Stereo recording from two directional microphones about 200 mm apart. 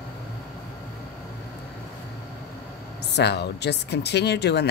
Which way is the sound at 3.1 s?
55° left (ahead or behind).